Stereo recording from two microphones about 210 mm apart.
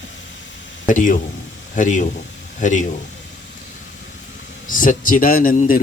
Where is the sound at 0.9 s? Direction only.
40° left (ahead or behind).